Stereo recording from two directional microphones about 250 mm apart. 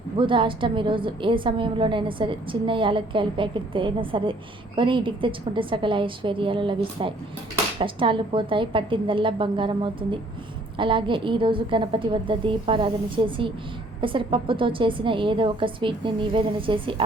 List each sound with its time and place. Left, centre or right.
0.2 s a woman's voice: centre